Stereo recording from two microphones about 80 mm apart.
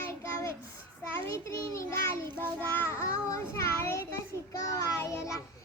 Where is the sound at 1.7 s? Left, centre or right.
Left.